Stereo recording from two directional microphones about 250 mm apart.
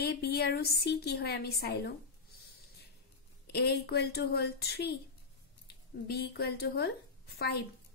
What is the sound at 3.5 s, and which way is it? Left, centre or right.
A woman's voice, left.